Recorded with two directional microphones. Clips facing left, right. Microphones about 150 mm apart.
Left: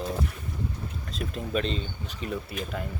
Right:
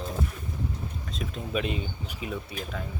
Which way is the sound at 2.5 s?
5° left (ahead or behind).